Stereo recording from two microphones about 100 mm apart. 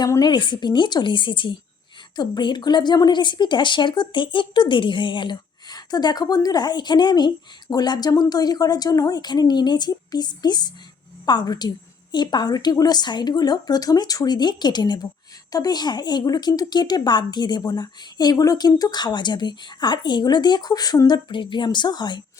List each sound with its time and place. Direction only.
0.0 s speech: 40° left (ahead or behind)